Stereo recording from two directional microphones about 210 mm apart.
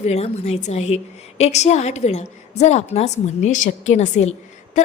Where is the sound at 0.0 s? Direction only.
30° left (ahead or behind).